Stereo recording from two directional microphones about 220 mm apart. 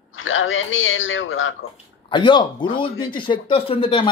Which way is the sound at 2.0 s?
20° left (ahead or behind).